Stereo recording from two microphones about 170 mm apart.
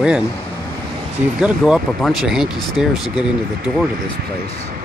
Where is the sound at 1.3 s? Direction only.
5° right (ahead or behind).